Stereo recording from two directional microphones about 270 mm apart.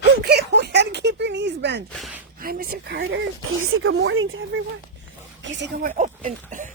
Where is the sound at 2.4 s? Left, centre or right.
Right.